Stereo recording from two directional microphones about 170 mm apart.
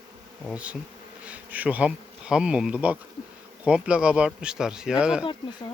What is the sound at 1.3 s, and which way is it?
Bee, 10° right (ahead or behind).